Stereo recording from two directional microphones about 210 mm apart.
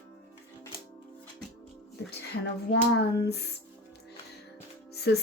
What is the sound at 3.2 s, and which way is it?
Speech, 50° left (ahead or behind).